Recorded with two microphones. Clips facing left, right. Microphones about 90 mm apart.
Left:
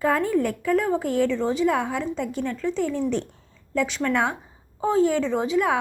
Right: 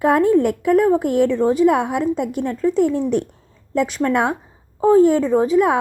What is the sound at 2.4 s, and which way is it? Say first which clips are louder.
Speech: right 9 dB; 45° right (ahead or behind).